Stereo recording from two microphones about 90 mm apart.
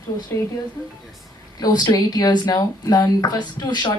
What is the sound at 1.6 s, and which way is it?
Speech, 45° left (ahead or behind).